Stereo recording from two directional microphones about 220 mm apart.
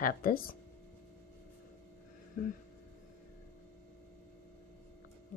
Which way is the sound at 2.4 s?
40° left (ahead or behind).